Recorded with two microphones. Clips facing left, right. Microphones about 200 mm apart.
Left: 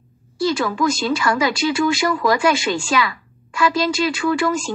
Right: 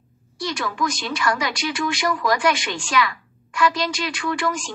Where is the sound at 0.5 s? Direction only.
25° left (ahead or behind).